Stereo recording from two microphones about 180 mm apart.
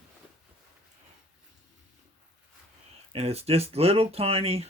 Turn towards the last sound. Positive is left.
turn(degrees=-35)  # may be behind; listen again after turning